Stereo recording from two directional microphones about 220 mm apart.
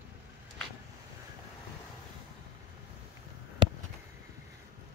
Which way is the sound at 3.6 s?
20° right (ahead or behind).